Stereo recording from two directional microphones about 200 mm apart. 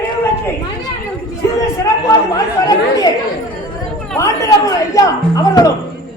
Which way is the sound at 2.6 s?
20° left (ahead or behind).